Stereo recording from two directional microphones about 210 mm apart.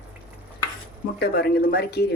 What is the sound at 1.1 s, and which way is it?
Speech, 50° left (ahead or behind).